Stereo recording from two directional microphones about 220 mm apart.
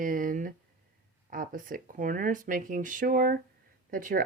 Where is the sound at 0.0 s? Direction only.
40° right (ahead or behind).